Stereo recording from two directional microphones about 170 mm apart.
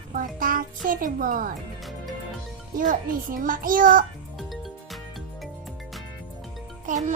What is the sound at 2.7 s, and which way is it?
Speech, 50° right (ahead or behind).